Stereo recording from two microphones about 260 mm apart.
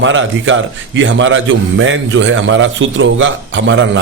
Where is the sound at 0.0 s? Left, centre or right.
Right.